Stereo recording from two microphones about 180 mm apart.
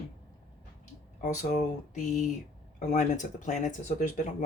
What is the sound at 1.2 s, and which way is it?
Speech, 40° left (ahead or behind).